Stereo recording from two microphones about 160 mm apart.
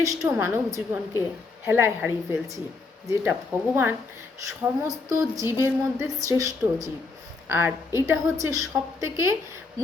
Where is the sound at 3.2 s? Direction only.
10° right (ahead or behind).